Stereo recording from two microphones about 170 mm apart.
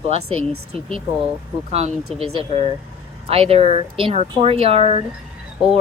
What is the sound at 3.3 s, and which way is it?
Speech, 35° right (ahead or behind).